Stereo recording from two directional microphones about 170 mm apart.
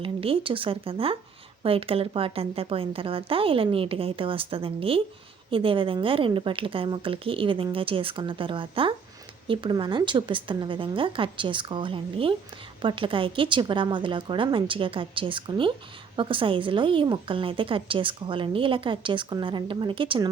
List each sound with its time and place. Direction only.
0.0 s a woman's voice: 30° right (ahead or behind)